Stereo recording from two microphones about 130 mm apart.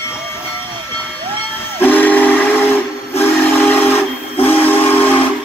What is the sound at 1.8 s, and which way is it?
Steam whistle, 15° left (ahead or behind).